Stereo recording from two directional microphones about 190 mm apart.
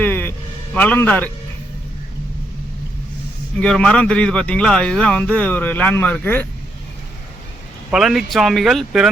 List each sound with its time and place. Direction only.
0.0 s a sound: 10° left (ahead or behind)
3.6 s a man's voice: 5° left (ahead or behind)
7.9 s a man's voice: centre (ahead or behind)